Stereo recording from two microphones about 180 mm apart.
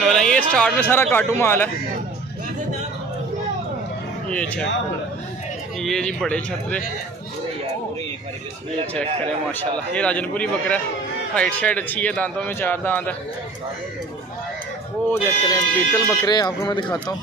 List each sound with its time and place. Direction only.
0.0 s speech: 5° left (ahead or behind)
4.3 s speech: 5° left (ahead or behind)
5.8 s speech: centre (ahead or behind)
9.5 s speech: 5° left (ahead or behind)
15.0 s speech: 10° left (ahead or behind)
16.3 s speech: 20° left (ahead or behind)